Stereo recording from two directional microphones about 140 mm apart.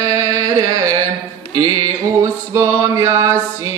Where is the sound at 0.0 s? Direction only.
20° right (ahead or behind).